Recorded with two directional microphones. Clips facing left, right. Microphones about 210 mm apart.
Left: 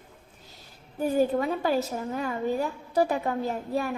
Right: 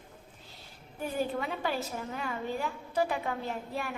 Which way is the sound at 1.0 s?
40° left (ahead or behind).